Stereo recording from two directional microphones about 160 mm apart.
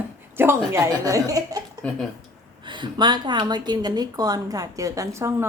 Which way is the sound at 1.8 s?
10° left (ahead or behind).